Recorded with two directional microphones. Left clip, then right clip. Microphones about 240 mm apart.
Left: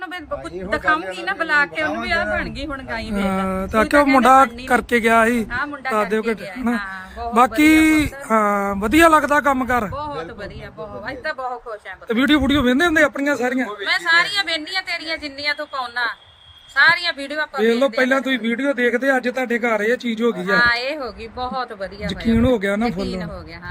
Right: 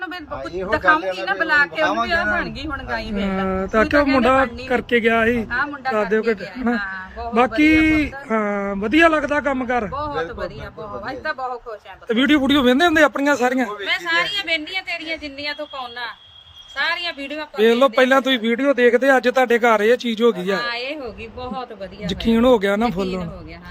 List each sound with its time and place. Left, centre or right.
0.7 s speech: centre
12.4 s speech: centre
17.6 s speech: centre
20.6 s speech: centre
22.0 s speech: centre
23.0 s speech: centre